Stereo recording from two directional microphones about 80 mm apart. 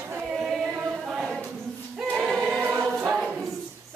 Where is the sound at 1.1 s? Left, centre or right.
Centre.